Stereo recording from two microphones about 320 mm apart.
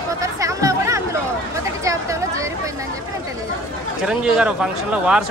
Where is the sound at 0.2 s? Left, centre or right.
Centre.